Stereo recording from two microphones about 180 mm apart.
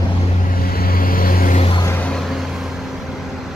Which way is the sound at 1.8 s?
10° left (ahead or behind).